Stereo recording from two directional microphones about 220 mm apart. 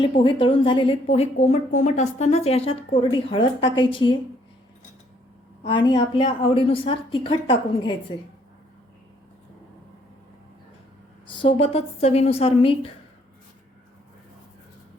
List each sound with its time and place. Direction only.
0.0 s a woman's voice: 20° left (ahead or behind)
5.6 s a woman's voice: 20° left (ahead or behind)
11.3 s a woman's voice: 25° left (ahead or behind)